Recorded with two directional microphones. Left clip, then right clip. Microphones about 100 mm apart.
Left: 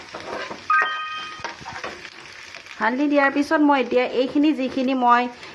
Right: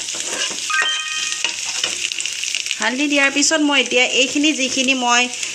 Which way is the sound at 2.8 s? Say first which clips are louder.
Right 1 dB; 25° right (ahead or behind).